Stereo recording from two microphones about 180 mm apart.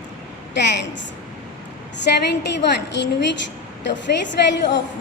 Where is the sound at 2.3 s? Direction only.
70° left (ahead or behind).